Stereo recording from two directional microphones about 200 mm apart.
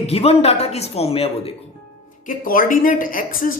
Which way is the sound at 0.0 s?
30° left (ahead or behind).